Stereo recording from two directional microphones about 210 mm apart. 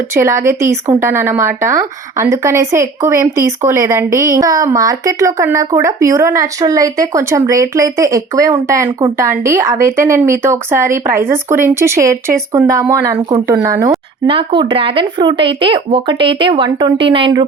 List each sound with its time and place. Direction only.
0.1 s speech: 10° right (ahead or behind)